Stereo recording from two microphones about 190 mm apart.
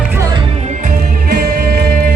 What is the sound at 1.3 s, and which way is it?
Music, 45° right (ahead or behind).